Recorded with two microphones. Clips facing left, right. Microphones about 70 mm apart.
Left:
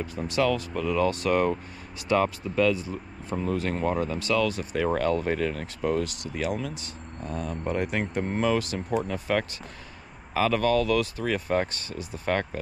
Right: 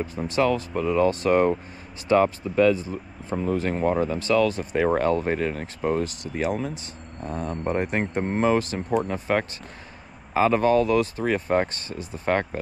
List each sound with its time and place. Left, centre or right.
0.0 s speech: right